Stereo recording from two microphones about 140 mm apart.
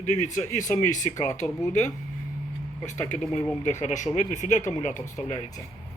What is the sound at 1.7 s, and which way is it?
Speech, 60° left (ahead or behind).